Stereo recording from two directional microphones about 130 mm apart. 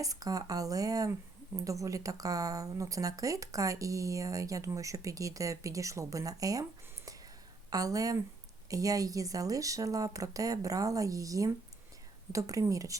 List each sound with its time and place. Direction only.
0.0 s speech: 30° right (ahead or behind)